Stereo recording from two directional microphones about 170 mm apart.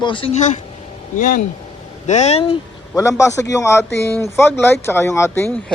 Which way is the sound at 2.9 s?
15° left (ahead or behind).